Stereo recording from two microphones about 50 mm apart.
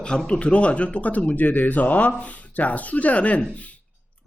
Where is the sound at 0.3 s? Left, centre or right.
Left.